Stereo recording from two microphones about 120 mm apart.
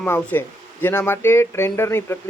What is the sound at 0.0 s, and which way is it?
Speech, 15° left (ahead or behind).